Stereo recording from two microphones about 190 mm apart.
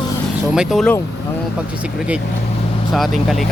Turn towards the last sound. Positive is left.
turn(degrees=0)  # may be behind; listen again after turning